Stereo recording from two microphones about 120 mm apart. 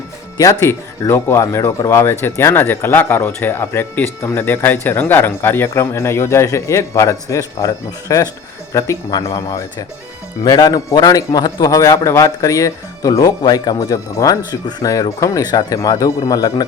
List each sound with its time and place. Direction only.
0.6 s speech: 20° left (ahead or behind)
10.4 s speech: 35° left (ahead or behind)